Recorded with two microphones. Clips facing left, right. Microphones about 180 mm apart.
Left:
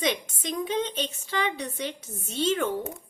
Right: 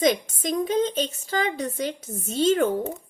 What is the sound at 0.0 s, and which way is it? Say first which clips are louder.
A woman's voice: right 6 dB; 40° right (ahead or behind).